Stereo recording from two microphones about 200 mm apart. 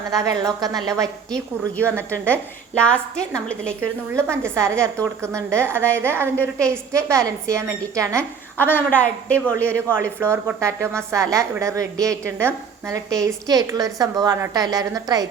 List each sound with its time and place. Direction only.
0.2 s a woman's voice: 20° right (ahead or behind)
2.3 s a woman's voice: 5° left (ahead or behind)
3.8 s a woman's voice: 15° right (ahead or behind)
8.5 s a woman's voice: 10° left (ahead or behind)
9.5 s a woman's voice: 15° right (ahead or behind)